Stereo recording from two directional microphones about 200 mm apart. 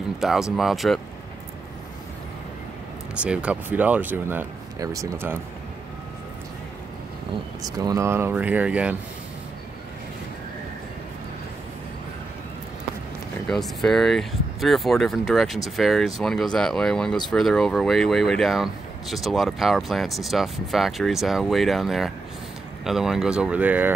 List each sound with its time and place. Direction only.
0.2 s speech: centre (ahead or behind)
3.2 s speech: 5° right (ahead or behind)
7.8 s speech: 15° right (ahead or behind)
13.5 s speech: centre (ahead or behind)